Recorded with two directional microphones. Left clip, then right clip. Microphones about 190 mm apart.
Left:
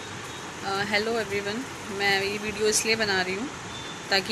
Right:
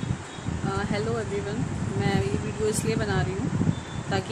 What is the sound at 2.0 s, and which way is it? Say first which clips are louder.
Speech: left 4 dB; 15° right (ahead or behind).